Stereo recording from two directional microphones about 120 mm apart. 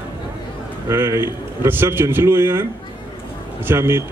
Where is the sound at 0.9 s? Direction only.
20° right (ahead or behind).